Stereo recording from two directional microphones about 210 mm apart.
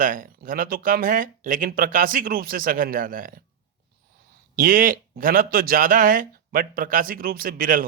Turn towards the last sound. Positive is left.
turn(degrees=-45)  # may be behind; listen again after turning